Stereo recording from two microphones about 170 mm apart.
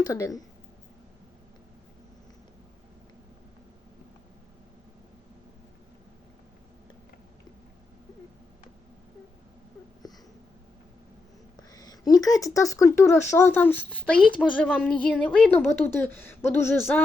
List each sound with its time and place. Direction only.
0.0 s speech: 20° left (ahead or behind)
10.0 s wheeze: 20° left (ahead or behind)
11.7 s a woman's voice: 20° left (ahead or behind)